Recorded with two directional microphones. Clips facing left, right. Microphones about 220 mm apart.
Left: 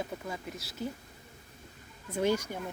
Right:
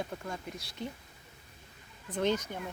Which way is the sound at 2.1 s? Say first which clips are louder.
Left 2 dB; 10° left (ahead or behind).